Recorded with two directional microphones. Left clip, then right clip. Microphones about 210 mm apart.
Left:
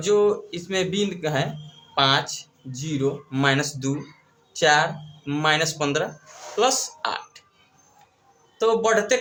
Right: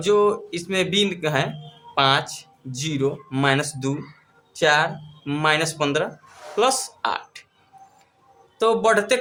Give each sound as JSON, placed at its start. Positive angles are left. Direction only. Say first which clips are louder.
{"t": 0.0, "sound": "speech", "louder": "right 1 dB", "side_deg": -20}
{"t": 8.5, "sound": "speech", "louder": "right 2 dB", "side_deg": -30}